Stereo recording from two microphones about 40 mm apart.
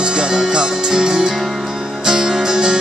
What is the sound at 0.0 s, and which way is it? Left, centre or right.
Music, centre.